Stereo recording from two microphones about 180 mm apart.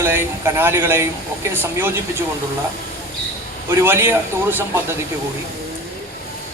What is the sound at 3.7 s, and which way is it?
Speech, 15° right (ahead or behind).